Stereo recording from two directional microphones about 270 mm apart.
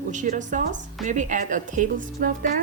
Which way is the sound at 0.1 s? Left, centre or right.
Right.